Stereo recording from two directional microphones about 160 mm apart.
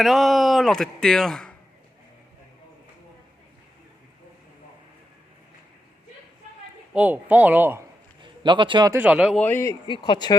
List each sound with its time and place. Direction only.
0.0 s speech: centre (ahead or behind)
6.9 s speech: 10° right (ahead or behind)
8.2 s a man's voice: 30° right (ahead or behind)
8.9 s speech: 10° right (ahead or behind)
9.4 s speech: 15° left (ahead or behind)
9.8 s speech: 30° left (ahead or behind)